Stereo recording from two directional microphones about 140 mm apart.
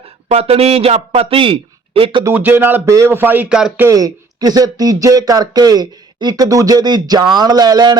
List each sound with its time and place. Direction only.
0.3 s speech: 45° right (ahead or behind)
2.2 s speech: 15° right (ahead or behind)
3.8 s speech: 25° right (ahead or behind)